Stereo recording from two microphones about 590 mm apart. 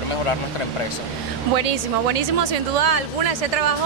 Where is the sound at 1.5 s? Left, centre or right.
Right.